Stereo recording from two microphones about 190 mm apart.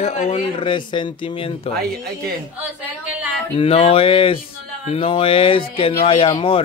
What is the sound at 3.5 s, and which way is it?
Speech, 30° left (ahead or behind).